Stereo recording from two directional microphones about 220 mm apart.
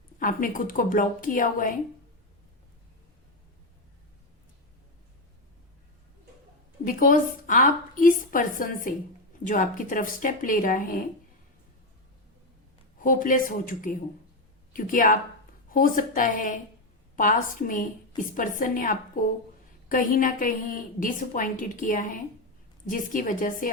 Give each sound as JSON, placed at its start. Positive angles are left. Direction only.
{"t": 0.2, "sound": "a woman's voice", "side_deg": 40}
{"t": 6.8, "sound": "a woman's voice", "side_deg": 40}
{"t": 13.0, "sound": "a woman's voice", "side_deg": 40}